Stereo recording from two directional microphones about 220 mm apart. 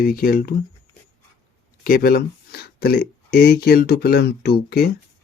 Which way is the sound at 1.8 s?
40° left (ahead or behind).